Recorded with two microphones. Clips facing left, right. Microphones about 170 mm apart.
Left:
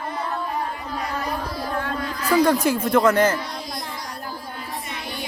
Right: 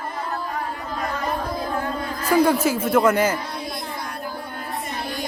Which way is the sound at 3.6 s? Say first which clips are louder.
Right 2 dB; 60° right (ahead or behind).